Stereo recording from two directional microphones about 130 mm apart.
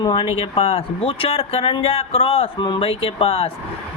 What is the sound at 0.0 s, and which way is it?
Speech, 40° left (ahead or behind).